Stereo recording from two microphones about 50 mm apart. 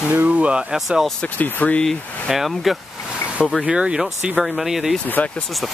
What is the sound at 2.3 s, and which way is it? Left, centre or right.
Speech, centre.